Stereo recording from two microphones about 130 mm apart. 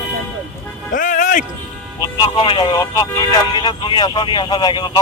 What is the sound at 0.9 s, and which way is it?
Music, 85° left.